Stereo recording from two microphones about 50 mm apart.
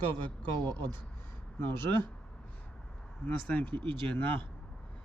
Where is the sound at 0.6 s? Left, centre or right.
Left.